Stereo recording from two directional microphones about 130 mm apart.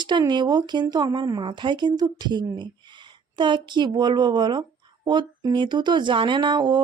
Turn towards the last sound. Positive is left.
turn(degrees=-35)  # may be behind; listen again after turning